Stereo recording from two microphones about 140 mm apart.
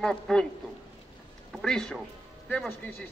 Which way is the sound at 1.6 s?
5° left (ahead or behind).